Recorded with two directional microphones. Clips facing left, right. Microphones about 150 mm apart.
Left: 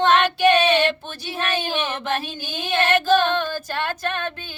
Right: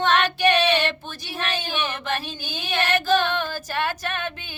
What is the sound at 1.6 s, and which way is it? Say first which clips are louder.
Speech: left 3 dB; 50° left (ahead or behind).